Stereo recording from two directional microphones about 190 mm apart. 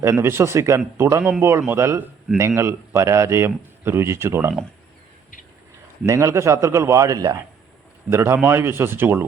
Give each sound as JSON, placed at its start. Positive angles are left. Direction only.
{"t": 0.0, "sound": "a man's voice", "side_deg": -15}
{"t": 6.0, "sound": "a man's voice", "side_deg": -15}